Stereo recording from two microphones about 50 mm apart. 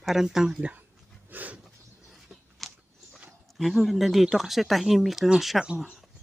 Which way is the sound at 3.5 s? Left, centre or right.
Centre.